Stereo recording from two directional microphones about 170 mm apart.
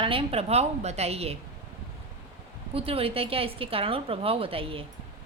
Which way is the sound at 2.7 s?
35° right (ahead or behind).